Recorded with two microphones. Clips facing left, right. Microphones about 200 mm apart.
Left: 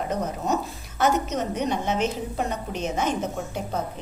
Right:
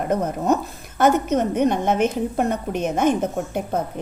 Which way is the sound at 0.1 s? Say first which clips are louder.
Right 8 dB; 55° right (ahead or behind).